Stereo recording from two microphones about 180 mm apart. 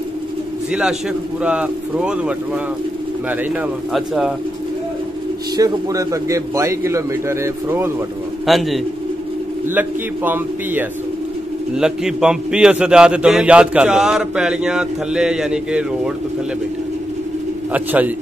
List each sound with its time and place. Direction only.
0.7 s a man's voice: 5° right (ahead or behind)
3.9 s a man's voice: centre (ahead or behind)
5.6 s a man's voice: 20° right (ahead or behind)
8.5 s a man's voice: centre (ahead or behind)
9.8 s a man's voice: 10° right (ahead or behind)
17.7 s a man's voice: 10° right (ahead or behind)